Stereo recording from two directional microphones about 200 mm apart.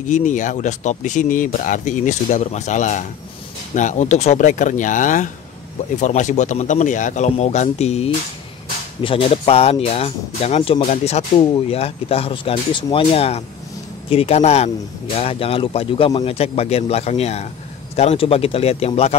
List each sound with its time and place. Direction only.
0.1 s speech: 40° left (ahead or behind)